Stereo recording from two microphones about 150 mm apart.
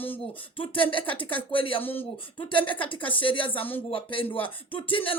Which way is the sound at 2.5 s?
35° left (ahead or behind).